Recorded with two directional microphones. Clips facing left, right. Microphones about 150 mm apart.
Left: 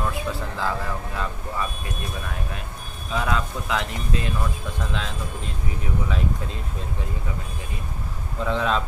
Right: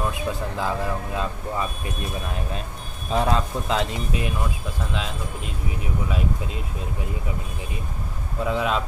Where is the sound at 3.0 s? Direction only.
35° right (ahead or behind); by 4.3 s 15° right (ahead or behind).